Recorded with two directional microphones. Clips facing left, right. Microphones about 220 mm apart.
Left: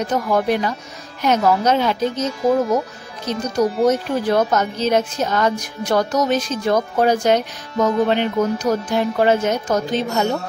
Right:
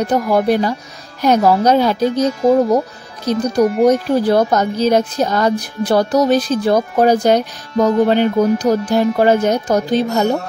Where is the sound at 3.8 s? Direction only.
35° right (ahead or behind).